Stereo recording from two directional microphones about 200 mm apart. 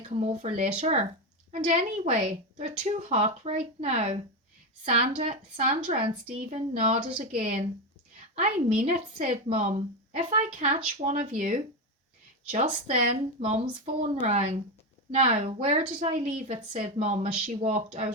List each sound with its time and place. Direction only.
0.0 s a woman's voice: 30° right (ahead or behind)
7.1 s a woman's voice: 25° right (ahead or behind)
8.8 s a woman's voice: 40° right (ahead or behind)
9.2 s a woman's voice: 30° right (ahead or behind)